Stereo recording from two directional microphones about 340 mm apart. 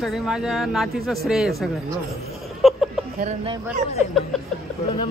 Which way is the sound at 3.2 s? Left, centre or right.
Centre.